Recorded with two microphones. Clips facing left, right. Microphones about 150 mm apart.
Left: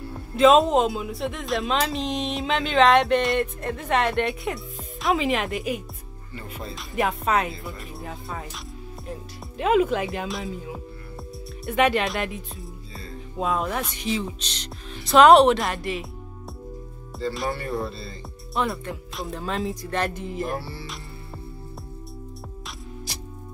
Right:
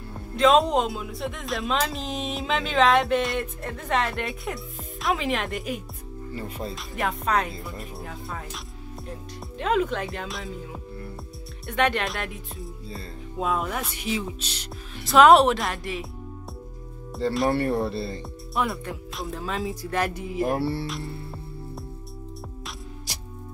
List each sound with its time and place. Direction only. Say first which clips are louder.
0.4 s speech: left 3 dB; centre (ahead or behind)
9.6 s speech: left 4 dB; 5° left (ahead or behind)
17.5 s speech: right 5 dB; 70° right (ahead or behind)
18.5 s speech: left 1 dB; 5° right (ahead or behind)
20.5 s speech: right 7 dB; 65° right (ahead or behind)